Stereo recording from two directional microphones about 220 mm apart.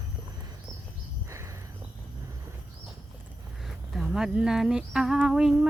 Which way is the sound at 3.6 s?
Centre (ahead or behind).